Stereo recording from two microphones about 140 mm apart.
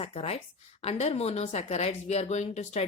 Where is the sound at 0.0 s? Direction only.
45° left (ahead or behind).